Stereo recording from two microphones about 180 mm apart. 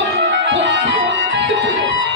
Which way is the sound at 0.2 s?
75° right (ahead or behind).